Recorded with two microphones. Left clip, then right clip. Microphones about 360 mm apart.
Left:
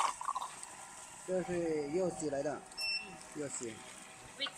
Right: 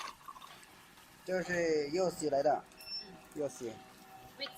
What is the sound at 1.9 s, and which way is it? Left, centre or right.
Speech, right.